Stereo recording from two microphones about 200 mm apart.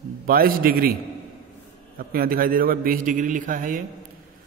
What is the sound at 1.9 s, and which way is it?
A man's voice, 50° right (ahead or behind).